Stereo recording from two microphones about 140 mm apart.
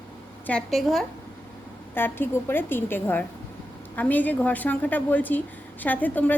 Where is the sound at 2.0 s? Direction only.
15° left (ahead or behind).